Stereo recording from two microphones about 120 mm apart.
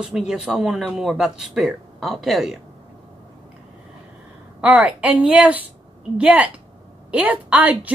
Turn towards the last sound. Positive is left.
turn(degrees=-10)  # may be behind; listen again after turning